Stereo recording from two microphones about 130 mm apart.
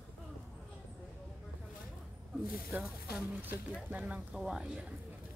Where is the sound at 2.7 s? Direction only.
10° right (ahead or behind).